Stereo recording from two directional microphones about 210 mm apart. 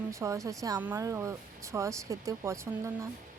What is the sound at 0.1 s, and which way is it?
A woman's voice, 15° right (ahead or behind).